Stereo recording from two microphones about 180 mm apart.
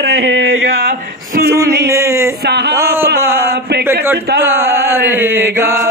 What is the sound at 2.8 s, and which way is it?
Chant, 15° right (ahead or behind).